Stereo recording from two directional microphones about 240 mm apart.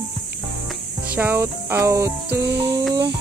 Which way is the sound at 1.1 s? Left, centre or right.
Centre.